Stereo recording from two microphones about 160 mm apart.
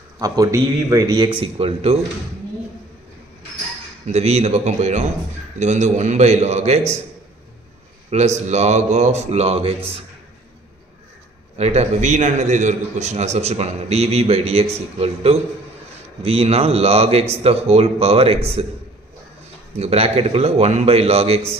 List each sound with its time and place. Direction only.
0.2 s a man's voice: 20° right (ahead or behind); by 2.0 s 40° right (ahead or behind)
4.1 s a man's voice: 40° right (ahead or behind)
8.1 s a man's voice: 45° right (ahead or behind)
11.5 s a man's voice: 45° right (ahead or behind)
19.8 s a man's voice: 40° right (ahead or behind)